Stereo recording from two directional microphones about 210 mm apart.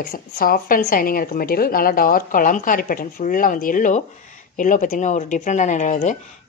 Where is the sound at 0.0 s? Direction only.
45° left (ahead or behind).